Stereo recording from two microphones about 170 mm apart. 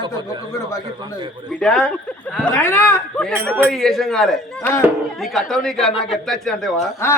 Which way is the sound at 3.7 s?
Centre (ahead or behind).